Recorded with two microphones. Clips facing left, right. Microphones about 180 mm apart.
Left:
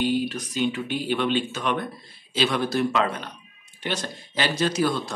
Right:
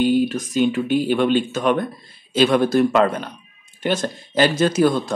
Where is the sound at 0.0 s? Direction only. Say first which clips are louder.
Right 7 dB; 50° right (ahead or behind).